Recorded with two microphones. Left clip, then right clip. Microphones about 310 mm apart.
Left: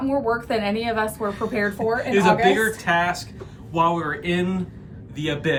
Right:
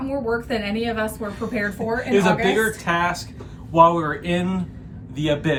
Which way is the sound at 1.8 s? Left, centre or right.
Centre.